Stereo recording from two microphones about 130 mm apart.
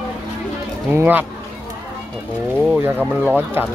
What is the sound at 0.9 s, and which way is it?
Speech, 15° right (ahead or behind).